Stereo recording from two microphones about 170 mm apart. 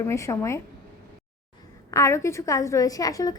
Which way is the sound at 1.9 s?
15° left (ahead or behind).